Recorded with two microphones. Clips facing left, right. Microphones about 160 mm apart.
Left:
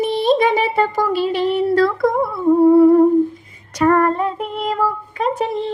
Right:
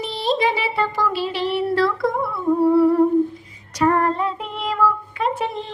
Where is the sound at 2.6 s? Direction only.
45° left (ahead or behind).